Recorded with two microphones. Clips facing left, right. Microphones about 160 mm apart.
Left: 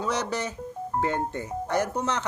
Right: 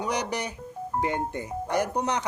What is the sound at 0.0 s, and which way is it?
Speech, 15° right (ahead or behind).